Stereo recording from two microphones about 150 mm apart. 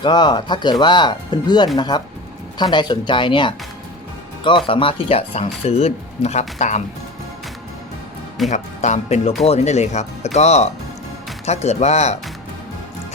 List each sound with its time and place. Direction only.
0.0 s speech: 30° left (ahead or behind)
4.6 s speech: 35° left (ahead or behind); by 6.8 s 50° left (ahead or behind)
8.4 s speech: 50° left (ahead or behind)